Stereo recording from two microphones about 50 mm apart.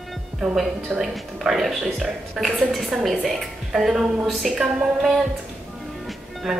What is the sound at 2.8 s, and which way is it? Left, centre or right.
A woman's voice, centre.